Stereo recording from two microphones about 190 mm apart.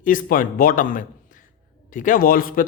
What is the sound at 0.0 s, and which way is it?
A man's voice, 45° left (ahead or behind).